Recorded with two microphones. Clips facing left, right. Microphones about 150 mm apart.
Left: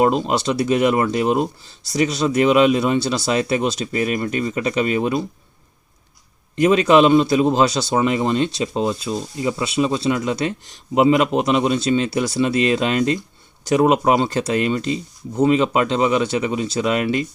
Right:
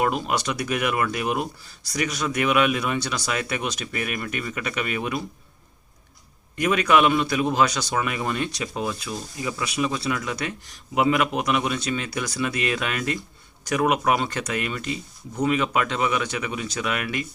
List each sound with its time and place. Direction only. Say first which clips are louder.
0.0 s a man's voice: left 6 dB; 25° left (ahead or behind)
6.6 s a man's voice: left 6 dB; 25° left (ahead or behind)